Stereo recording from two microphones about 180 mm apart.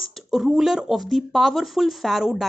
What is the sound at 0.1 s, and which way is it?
A woman's voice, centre (ahead or behind).